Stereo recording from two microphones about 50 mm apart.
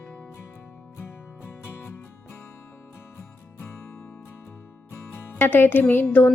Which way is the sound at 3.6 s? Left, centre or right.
Left.